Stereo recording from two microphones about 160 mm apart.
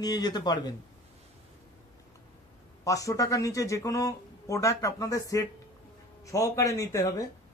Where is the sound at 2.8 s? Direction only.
20° left (ahead or behind).